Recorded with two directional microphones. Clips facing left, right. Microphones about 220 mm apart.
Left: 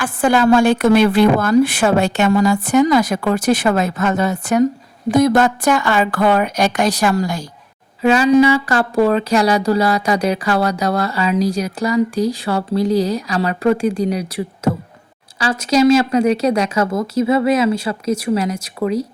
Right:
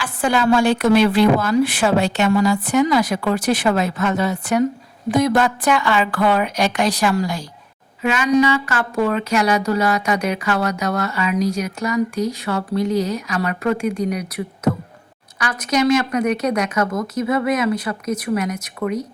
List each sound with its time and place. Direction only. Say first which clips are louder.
0.0 s a woman's voice: left 4 dB; 50° left (ahead or behind)
8.0 s a woman's voice: left 5 dB; 35° left (ahead or behind)